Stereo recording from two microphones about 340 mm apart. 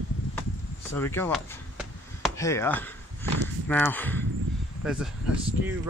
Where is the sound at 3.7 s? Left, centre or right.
Centre.